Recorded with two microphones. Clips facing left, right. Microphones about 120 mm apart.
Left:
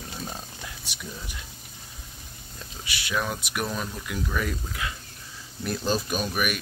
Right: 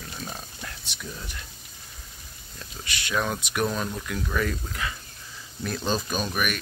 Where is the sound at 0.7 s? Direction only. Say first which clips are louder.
Right 1 dB; 10° left (ahead or behind).